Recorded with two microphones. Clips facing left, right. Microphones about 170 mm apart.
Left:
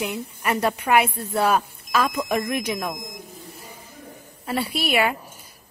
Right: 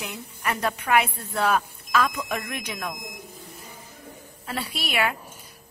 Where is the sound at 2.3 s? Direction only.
15° left (ahead or behind).